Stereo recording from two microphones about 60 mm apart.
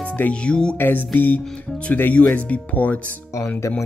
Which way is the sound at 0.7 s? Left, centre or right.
Left.